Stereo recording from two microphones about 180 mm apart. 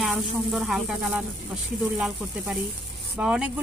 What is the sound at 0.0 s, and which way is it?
A woman's voice, centre (ahead or behind).